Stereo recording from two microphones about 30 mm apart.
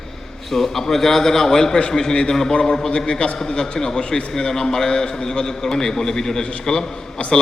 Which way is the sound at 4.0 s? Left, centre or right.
Left.